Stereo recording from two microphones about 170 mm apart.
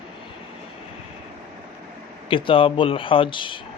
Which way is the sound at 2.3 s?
30° left (ahead or behind).